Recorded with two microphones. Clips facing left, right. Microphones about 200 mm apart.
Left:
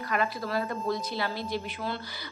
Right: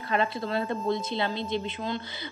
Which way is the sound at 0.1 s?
25° right (ahead or behind).